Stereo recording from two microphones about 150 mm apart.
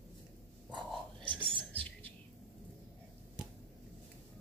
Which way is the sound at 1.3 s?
35° right (ahead or behind).